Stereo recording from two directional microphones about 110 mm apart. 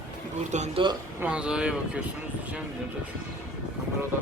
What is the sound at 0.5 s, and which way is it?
Speech, 90° right.